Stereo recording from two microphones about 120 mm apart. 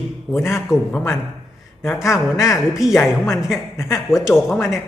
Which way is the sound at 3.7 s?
20° left (ahead or behind).